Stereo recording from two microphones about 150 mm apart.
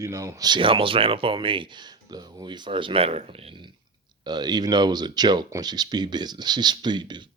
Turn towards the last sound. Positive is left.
turn(degrees=-30)  # may be behind; listen again after turning